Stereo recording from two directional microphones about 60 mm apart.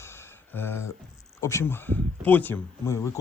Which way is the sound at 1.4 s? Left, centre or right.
Left.